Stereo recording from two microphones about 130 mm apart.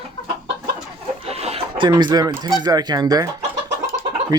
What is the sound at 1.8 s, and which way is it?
Speech, 35° right (ahead or behind).